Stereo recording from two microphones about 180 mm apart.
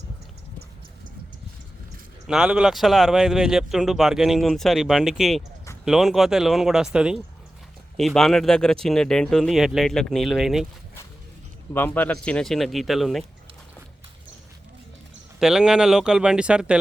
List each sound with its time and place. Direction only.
2.2 s speech: 5° right (ahead or behind)
11.7 s speech: 10° left (ahead or behind)
15.4 s speech: 5° right (ahead or behind)